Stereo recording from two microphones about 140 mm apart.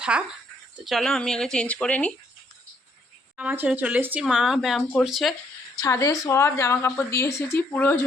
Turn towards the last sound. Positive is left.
turn(degrees=15)  # may be behind; listen again after turning